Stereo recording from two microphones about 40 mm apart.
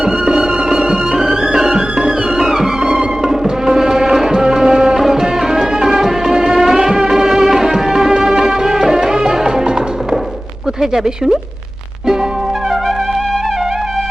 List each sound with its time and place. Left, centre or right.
0.0 s music: centre
10.8 s speech: centre